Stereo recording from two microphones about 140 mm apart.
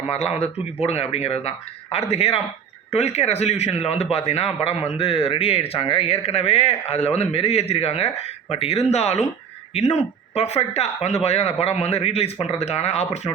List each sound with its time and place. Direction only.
0.1 s a man's voice: 45° left (ahead or behind)